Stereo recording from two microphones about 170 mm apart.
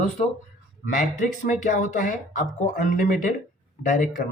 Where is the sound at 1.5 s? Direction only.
45° left (ahead or behind).